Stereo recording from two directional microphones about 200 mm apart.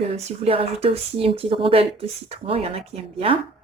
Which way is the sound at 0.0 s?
30° right (ahead or behind).